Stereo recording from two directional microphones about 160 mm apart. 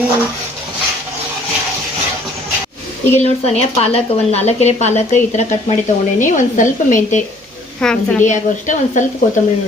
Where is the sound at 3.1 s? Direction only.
40° left (ahead or behind).